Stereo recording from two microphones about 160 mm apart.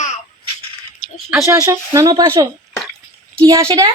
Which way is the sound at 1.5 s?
20° right (ahead or behind).